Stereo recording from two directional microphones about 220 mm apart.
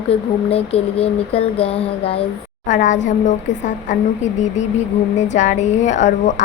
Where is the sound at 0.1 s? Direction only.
25° left (ahead or behind).